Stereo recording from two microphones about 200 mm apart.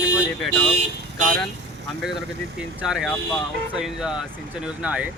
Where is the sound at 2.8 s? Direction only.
5° right (ahead or behind).